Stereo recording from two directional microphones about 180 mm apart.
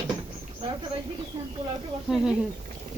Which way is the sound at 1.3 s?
30° right (ahead or behind).